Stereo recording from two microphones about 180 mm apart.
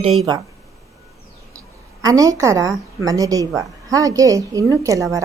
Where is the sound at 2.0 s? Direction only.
20° right (ahead or behind).